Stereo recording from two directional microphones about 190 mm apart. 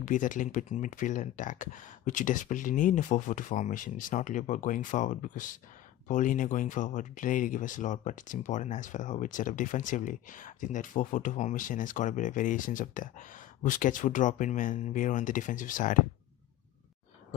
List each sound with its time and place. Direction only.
0.0 s speech: 45° left (ahead or behind)